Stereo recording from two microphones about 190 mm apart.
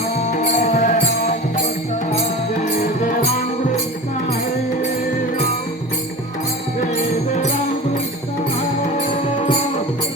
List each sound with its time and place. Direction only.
0.3 s music: 35° left (ahead or behind)